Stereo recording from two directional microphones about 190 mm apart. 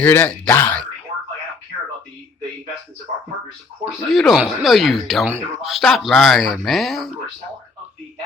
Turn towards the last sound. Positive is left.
turn(degrees=0)  # may be behind; listen again after turning